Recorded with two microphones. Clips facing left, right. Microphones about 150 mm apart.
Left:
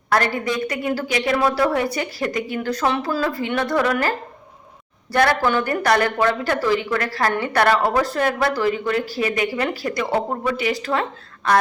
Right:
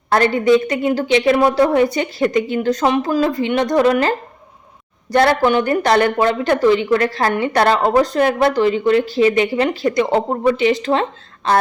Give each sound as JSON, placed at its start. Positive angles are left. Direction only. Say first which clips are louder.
{"t": 0.1, "sound": "speech", "louder": "right 8 dB", "side_deg": -25}
{"t": 5.1, "sound": "speech", "louder": "right 4 dB", "side_deg": -20}